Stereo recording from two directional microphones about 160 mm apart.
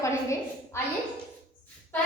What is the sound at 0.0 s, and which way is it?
Speech, 20° left (ahead or behind).